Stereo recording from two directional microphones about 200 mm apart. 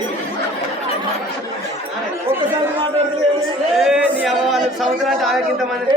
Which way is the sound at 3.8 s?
Centre (ahead or behind).